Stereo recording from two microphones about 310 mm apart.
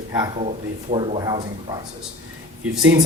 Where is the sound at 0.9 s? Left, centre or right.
Centre.